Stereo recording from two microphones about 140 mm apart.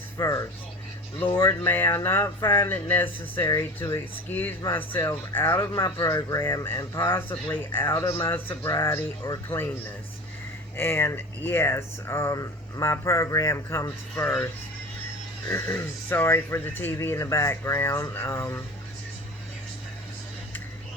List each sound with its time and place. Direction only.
0.2 s speech: 25° left (ahead or behind)
10.8 s speech: 15° left (ahead or behind)
15.5 s speech: 15° left (ahead or behind)